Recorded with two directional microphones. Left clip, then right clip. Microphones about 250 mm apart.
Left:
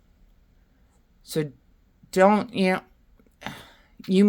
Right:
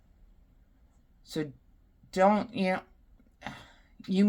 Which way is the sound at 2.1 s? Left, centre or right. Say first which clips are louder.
Left 6 dB; left.